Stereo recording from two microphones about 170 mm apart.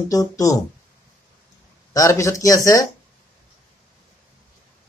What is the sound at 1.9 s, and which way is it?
Speech, 20° left (ahead or behind).